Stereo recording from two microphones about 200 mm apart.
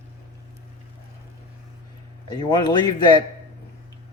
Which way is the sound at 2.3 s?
20° left (ahead or behind).